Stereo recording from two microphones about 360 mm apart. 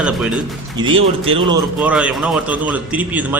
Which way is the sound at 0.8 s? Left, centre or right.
Centre.